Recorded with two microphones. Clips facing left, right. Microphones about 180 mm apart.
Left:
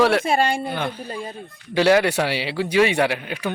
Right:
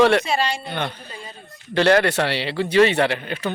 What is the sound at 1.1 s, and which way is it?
Speech, 50° left (ahead or behind).